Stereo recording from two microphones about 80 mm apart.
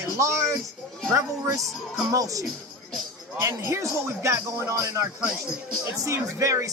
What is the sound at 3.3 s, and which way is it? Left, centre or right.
A man's voice, right.